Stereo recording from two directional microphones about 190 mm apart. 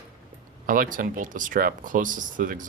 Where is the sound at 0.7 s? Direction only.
45° right (ahead or behind).